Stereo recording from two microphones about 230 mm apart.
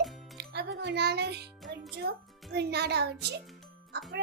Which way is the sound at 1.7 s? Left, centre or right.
Right.